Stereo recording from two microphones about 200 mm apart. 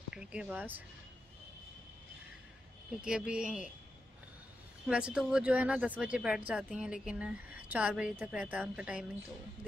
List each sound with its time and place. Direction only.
0.1 s speech: 5° right (ahead or behind)
3.0 s a woman's voice: 5° right (ahead or behind)
4.8 s a woman's voice: 5° right (ahead or behind)